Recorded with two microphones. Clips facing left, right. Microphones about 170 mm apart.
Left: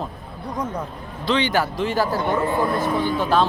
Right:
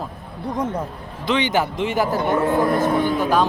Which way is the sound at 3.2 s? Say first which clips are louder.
Left 2 dB; 15° right (ahead or behind).